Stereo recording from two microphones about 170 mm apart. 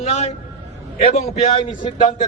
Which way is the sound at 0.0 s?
40° left (ahead or behind).